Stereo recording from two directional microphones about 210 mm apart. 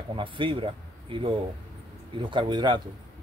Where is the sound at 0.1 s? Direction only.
25° right (ahead or behind).